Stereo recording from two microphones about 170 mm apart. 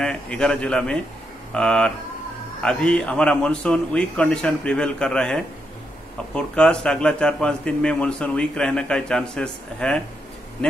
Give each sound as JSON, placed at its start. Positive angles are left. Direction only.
{"t": 0.0, "sound": "speech", "side_deg": 5}